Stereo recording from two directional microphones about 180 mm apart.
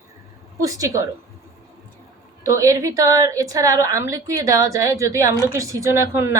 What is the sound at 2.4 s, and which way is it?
A woman's voice, 15° right (ahead or behind).